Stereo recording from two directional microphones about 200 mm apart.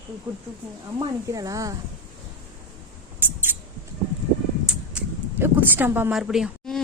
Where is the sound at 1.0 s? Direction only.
15° right (ahead or behind).